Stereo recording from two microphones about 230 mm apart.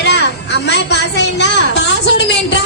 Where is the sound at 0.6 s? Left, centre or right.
Left.